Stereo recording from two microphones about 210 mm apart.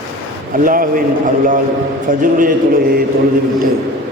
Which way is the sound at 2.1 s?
40° right (ahead or behind).